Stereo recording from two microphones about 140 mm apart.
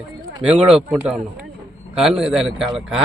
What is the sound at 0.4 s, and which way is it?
A man's voice, 5° right (ahead or behind).